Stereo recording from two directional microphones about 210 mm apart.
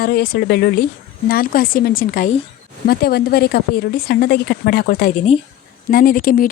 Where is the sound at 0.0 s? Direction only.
45° left (ahead or behind).